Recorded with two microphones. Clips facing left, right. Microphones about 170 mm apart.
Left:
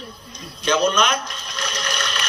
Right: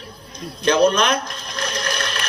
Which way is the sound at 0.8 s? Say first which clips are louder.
Right 4 dB; 55° right (ahead or behind).